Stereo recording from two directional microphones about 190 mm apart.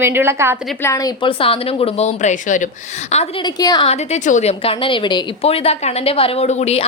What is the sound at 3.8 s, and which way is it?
A woman's voice, 35° left (ahead or behind).